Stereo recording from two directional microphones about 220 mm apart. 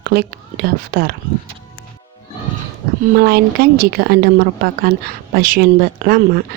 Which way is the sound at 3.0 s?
45° right (ahead or behind).